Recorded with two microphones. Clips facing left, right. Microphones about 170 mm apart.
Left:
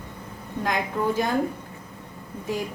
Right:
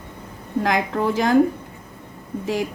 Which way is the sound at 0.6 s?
90° right.